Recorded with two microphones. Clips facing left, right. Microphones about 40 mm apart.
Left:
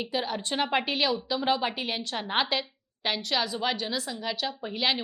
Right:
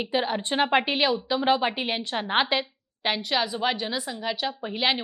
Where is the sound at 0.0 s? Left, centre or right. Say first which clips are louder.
Right 4 dB; right.